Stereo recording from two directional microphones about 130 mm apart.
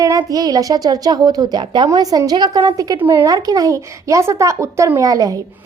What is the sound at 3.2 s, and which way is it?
A woman's voice, 30° right (ahead or behind).